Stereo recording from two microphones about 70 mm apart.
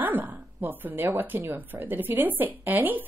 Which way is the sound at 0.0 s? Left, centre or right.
Right.